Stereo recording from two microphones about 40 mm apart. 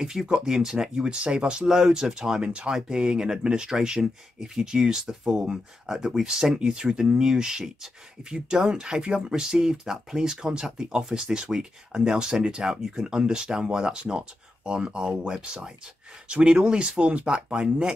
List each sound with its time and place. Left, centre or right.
0.0 s speech: centre
2.4 s speech: right